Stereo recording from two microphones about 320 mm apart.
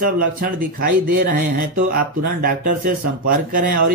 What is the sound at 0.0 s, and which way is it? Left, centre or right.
Speech, right.